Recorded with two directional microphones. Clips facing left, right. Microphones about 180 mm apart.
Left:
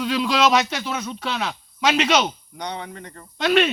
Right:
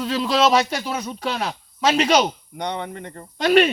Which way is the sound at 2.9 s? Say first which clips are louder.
Right 4 dB; 25° right (ahead or behind).